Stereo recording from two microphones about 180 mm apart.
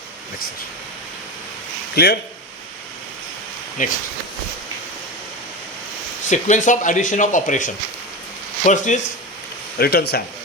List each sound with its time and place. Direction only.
2.0 s speech: 65° left (ahead or behind)
3.8 s speech: 45° left (ahead or behind)
6.2 s speech: 45° left (ahead or behind)
9.7 s speech: 60° left (ahead or behind)